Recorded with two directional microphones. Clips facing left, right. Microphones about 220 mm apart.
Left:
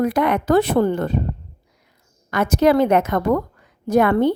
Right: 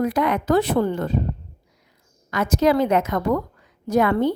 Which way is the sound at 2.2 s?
60° left (ahead or behind).